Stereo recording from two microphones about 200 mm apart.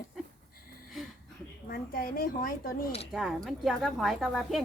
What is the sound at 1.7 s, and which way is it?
Speech, 45° left (ahead or behind).